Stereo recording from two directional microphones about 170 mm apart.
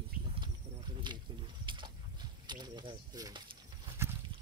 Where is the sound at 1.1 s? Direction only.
25° right (ahead or behind).